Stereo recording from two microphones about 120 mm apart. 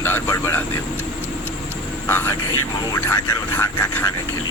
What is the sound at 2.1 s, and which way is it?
Speech, 20° left (ahead or behind).